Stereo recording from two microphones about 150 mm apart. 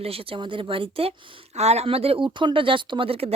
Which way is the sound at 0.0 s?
40° right (ahead or behind).